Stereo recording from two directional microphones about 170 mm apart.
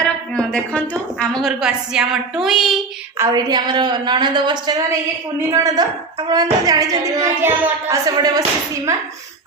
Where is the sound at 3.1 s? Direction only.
20° right (ahead or behind).